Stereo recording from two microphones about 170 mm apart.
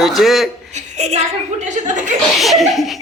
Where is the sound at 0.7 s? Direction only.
40° right (ahead or behind).